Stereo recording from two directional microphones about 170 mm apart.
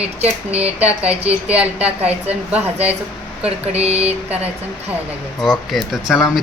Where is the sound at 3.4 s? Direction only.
40° right (ahead or behind).